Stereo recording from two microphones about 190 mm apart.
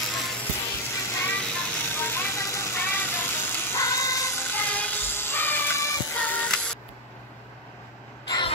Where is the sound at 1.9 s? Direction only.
10° left (ahead or behind).